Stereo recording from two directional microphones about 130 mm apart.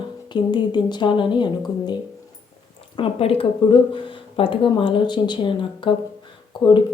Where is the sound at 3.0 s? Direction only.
45° left (ahead or behind).